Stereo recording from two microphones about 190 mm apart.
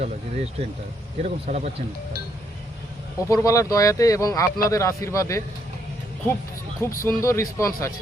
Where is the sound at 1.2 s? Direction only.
35° right (ahead or behind).